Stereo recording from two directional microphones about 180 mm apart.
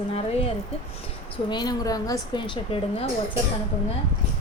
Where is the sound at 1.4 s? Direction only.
25° left (ahead or behind).